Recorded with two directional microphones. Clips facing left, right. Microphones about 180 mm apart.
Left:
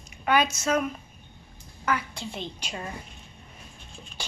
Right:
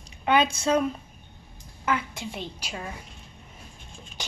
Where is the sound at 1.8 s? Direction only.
25° right (ahead or behind).